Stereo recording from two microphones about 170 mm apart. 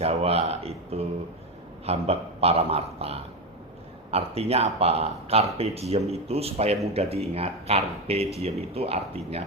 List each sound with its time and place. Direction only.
0.0 s speech: 35° right (ahead or behind)